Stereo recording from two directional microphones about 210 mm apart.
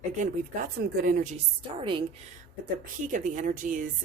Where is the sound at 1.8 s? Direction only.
25° right (ahead or behind).